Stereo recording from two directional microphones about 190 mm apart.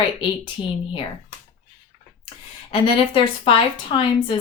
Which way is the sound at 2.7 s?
30° left (ahead or behind).